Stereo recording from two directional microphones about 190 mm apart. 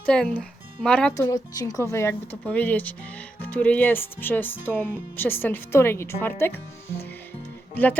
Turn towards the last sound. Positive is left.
turn(degrees=10)  # may be behind; listen again after turning